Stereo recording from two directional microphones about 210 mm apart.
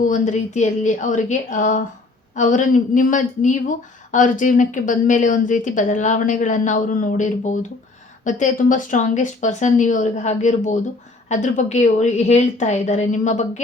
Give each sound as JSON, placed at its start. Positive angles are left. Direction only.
{"t": 0.0, "sound": "speech", "side_deg": 35}